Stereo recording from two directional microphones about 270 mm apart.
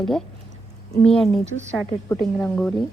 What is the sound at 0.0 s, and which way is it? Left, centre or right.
Speech, centre.